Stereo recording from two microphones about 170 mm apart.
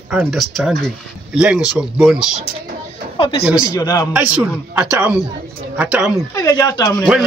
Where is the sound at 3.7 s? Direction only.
20° left (ahead or behind).